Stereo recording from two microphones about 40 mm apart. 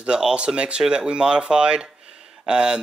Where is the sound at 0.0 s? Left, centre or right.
Right.